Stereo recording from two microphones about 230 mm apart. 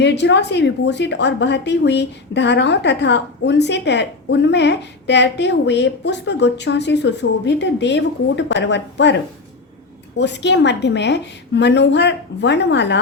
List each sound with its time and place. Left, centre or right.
0.0 s a woman's voice: left